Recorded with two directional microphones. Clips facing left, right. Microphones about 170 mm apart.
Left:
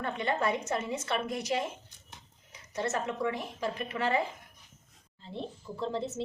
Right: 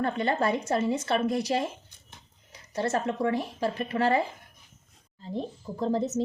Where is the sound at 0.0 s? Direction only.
35° right (ahead or behind).